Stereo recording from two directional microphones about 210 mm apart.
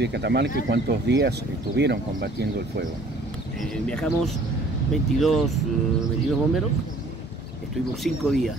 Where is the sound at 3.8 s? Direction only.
5° left (ahead or behind).